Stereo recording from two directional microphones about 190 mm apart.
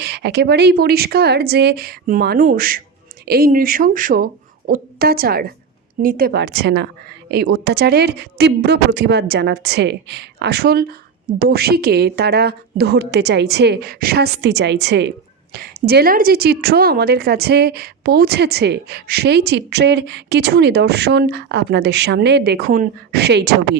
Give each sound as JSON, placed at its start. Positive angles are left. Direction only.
{"t": 0.0, "sound": "a woman's voice", "side_deg": -60}